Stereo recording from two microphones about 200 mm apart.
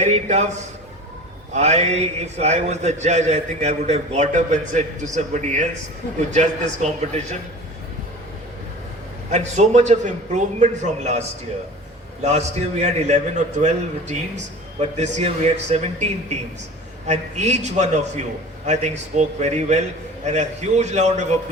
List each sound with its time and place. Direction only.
0.0 s a man's voice: 35° right (ahead or behind)
1.5 s a man's voice: 35° right (ahead or behind)
9.3 s a man's voice: 35° right (ahead or behind)
12.2 s a man's voice: 35° right (ahead or behind)